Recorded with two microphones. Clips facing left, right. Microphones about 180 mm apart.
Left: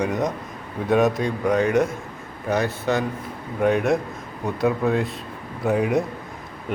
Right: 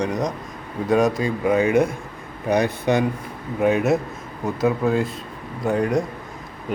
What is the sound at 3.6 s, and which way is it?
Speech, 5° right (ahead or behind).